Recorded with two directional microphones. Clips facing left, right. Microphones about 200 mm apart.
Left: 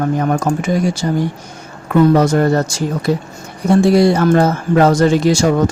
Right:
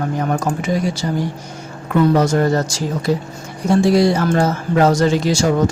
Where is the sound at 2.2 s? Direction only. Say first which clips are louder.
Left 2 dB; 60° left (ahead or behind).